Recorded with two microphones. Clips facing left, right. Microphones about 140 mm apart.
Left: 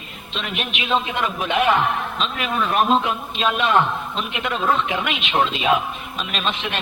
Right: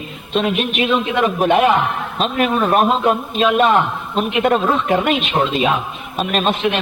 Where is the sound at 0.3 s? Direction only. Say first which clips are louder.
Right 11 dB; 45° right (ahead or behind).